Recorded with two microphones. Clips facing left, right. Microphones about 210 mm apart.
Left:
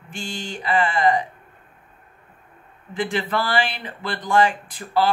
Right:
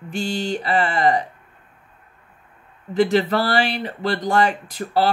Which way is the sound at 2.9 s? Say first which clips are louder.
Right 7 dB; 40° right (ahead or behind).